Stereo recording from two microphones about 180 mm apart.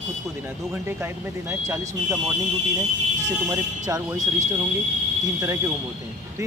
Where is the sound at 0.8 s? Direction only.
10° right (ahead or behind).